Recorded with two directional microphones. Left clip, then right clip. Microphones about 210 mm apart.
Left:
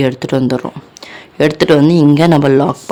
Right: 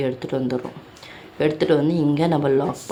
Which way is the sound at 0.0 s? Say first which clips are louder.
Left 9 dB; 60° left (ahead or behind).